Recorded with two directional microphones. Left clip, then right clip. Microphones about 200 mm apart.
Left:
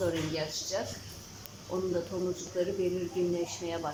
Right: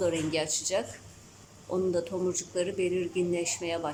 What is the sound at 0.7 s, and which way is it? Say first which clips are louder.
Speech: right 3 dB; 15° right (ahead or behind).